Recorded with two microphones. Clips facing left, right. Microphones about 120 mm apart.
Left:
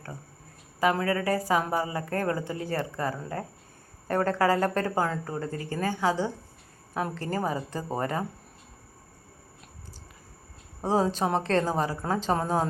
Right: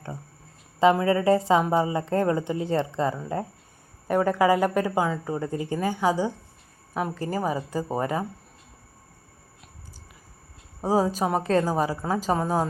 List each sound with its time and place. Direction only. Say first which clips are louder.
0.8 s speech: right 5 dB; 25° right (ahead or behind)
10.8 s speech: right 2 dB; 10° right (ahead or behind)